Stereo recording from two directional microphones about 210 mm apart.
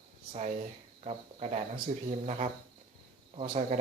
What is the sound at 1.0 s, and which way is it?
Speech, 30° right (ahead or behind).